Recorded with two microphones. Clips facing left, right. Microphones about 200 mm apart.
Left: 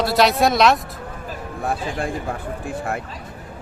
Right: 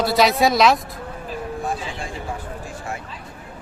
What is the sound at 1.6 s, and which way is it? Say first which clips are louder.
Speech: left 3 dB; 60° left (ahead or behind).